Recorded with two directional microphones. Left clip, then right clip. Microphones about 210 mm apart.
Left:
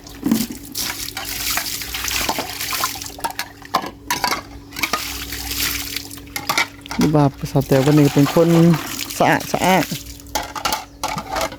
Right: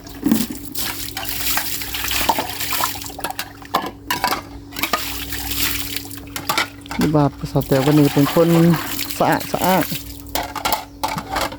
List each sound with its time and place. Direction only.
0.3 s liquid: centre (ahead or behind); by 7.8 s 20° left (ahead or behind)
7.8 s speech: centre (ahead or behind)
8.5 s pour: 5° right (ahead or behind)
9.1 s speech: 20° left (ahead or behind)
10.3 s a sound: centre (ahead or behind)